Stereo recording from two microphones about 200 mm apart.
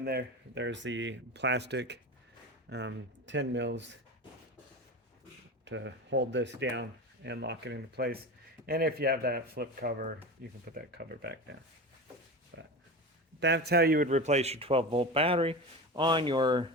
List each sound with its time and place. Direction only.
0.0 s speech: 55° right (ahead or behind)
5.6 s speech: 65° right (ahead or behind)
12.5 s a sound: 55° right (ahead or behind)
13.4 s a man's voice: 55° right (ahead or behind); by 16.6 s 20° right (ahead or behind)